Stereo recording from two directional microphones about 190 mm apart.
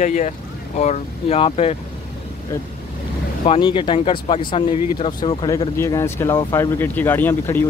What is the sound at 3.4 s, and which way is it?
Speech, 25° left (ahead or behind).